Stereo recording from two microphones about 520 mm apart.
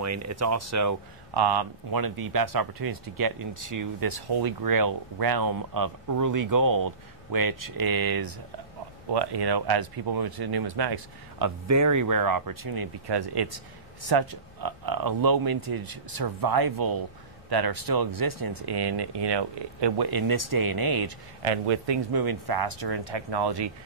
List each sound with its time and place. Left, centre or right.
0.0 s speech: right
1.3 s speech: right
18.7 s speech: right
21.4 s speech: right